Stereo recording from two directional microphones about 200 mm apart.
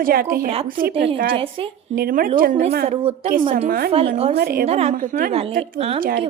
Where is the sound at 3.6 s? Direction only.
45° right (ahead or behind).